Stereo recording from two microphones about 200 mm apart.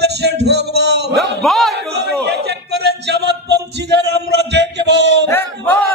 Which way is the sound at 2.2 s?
55° right (ahead or behind).